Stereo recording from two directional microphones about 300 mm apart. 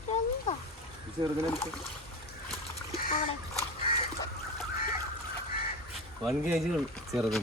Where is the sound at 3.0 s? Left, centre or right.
Left.